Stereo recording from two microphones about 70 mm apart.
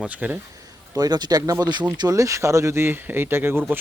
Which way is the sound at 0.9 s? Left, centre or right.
Right.